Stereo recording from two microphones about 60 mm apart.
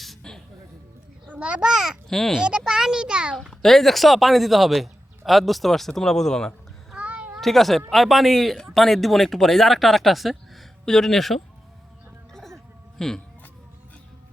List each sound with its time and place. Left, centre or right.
0.2 s music: centre
1.3 s a child's voice: centre
2.0 s a child's voice: centre
2.4 s a child's voice: centre
3.6 s a man's voice: centre
6.9 s a sound: right
7.4 s a man's voice: centre
12.3 s a sound: centre
13.0 s a child's voice: centre